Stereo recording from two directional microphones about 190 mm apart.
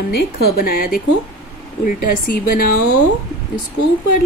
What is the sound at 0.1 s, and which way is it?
A woman's voice, 50° left (ahead or behind).